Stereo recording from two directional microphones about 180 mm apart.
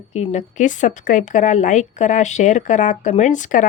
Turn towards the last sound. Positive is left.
turn(degrees=45)  # may be behind; listen again after turning